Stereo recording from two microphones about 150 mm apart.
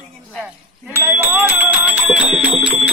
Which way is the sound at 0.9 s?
15° right (ahead or behind).